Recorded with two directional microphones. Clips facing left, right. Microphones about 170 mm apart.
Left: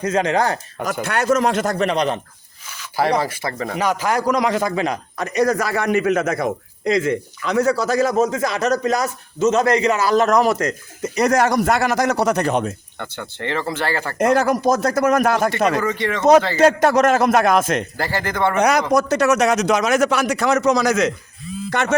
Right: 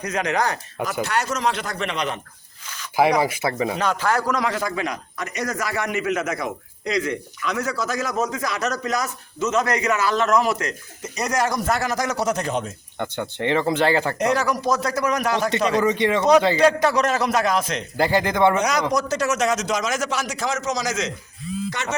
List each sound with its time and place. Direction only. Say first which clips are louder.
0.0 s a man's voice: left 5 dB; 30° left (ahead or behind)
1.0 s speech: left 7 dB; 55° left (ahead or behind); by 2.2 s 35° left (ahead or behind)
2.6 s a sound: even; 10° left (ahead or behind)
2.9 s speech: right 1 dB; 15° right (ahead or behind)
3.8 s a man's voice: left 2 dB; 10° left (ahead or behind); by 11.1 s 45° left (ahead or behind)
11.1 s speech: left 6 dB; 60° left (ahead or behind)
13.0 s speech: right 6 dB; 15° right (ahead or behind)
14.2 s speech: left 5 dB; 50° left (ahead or behind)
15.8 s speech: right 2 dB; 15° right (ahead or behind)
16.6 s speech: left 4 dB; 50° left (ahead or behind)
17.9 s speech: right 3 dB; 15° right (ahead or behind)
18.5 s a man's voice: left 5 dB; 60° left (ahead or behind)